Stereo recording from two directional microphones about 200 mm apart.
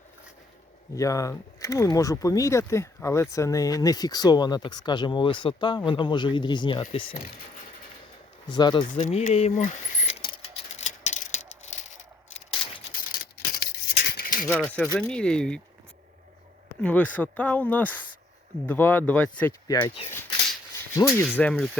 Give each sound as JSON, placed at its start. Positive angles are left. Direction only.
{"t": 0.9, "sound": "speech", "side_deg": 15}
{"t": 8.4, "sound": "speech", "side_deg": 20}
{"t": 8.9, "sound": "speech", "side_deg": 35}
{"t": 10.2, "sound": "a sound", "side_deg": 30}
{"t": 13.1, "sound": "a sound", "side_deg": 50}
{"t": 14.5, "sound": "speech", "side_deg": 5}
{"t": 16.8, "sound": "speech", "side_deg": 5}
{"t": 19.6, "sound": "speech", "side_deg": 20}